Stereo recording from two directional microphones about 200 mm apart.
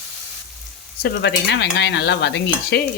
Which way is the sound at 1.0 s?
60° left (ahead or behind).